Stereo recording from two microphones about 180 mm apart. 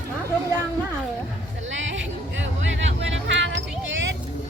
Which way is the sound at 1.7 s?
90° right.